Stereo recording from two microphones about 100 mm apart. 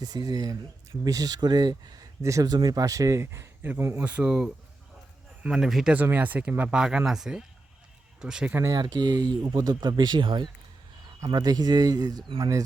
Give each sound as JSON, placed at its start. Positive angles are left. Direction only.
{"t": 0.0, "sound": "speech", "side_deg": -40}
{"t": 4.0, "sound": "speech", "side_deg": -10}
{"t": 5.9, "sound": "speech", "side_deg": -15}
{"t": 8.7, "sound": "speech", "side_deg": -45}
{"t": 11.3, "sound": "speech", "side_deg": -40}